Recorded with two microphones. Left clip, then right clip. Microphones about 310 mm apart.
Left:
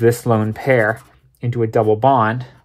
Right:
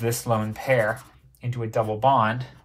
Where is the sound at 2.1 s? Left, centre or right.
Left.